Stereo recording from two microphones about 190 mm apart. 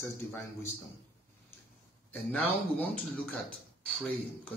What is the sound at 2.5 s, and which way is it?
Speech, 10° left (ahead or behind).